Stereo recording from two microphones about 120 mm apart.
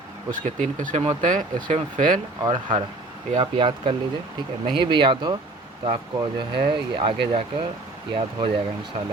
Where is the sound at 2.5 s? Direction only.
50° right (ahead or behind).